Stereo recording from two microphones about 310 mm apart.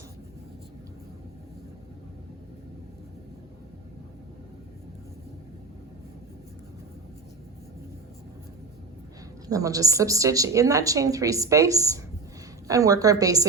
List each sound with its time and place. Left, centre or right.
9.5 s a woman's voice: centre